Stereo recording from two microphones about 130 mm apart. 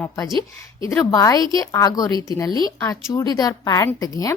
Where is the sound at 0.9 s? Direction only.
25° left (ahead or behind).